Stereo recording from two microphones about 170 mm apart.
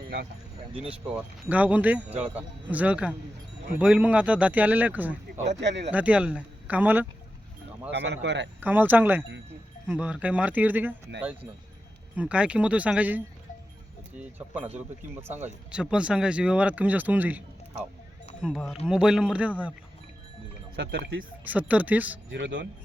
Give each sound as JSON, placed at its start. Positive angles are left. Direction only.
{"t": 0.9, "sound": "speech", "side_deg": -5}
{"t": 5.5, "sound": "speech", "side_deg": -90}
{"t": 5.9, "sound": "speech", "side_deg": -10}
{"t": 7.9, "sound": "speech", "side_deg": -90}
{"t": 8.6, "sound": "speech", "side_deg": -10}
{"t": 12.1, "sound": "speech", "side_deg": -5}
{"t": 14.7, "sound": "speech", "side_deg": -40}
{"t": 15.4, "sound": "speech", "side_deg": -5}
{"t": 20.7, "sound": "speech", "side_deg": -90}
{"t": 21.7, "sound": "speech", "side_deg": -10}
{"t": 22.3, "sound": "speech", "side_deg": -90}